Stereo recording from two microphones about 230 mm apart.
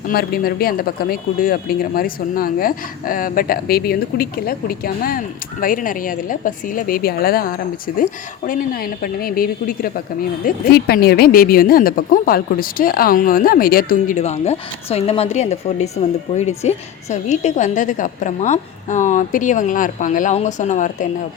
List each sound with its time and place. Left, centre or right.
0.1 s speech: left